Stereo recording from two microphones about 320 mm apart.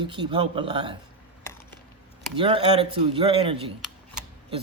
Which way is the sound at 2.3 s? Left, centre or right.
Centre.